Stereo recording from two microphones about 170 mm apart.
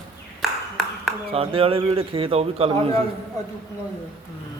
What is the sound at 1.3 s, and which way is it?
Speech, 35° right (ahead or behind).